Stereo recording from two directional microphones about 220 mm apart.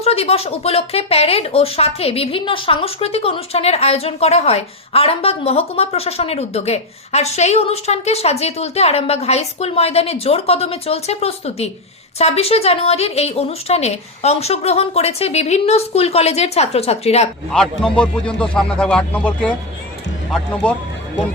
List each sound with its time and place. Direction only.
0.0 s a woman's voice: 25° left (ahead or behind)
17.5 s speech: 5° left (ahead or behind)